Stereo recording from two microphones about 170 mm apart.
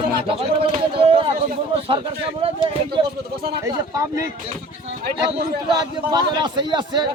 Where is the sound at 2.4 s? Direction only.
35° right (ahead or behind).